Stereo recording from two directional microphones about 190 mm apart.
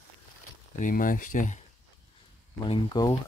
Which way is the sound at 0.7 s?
45° left (ahead or behind).